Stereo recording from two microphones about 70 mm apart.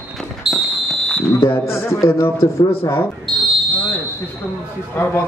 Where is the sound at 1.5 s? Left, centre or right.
Left.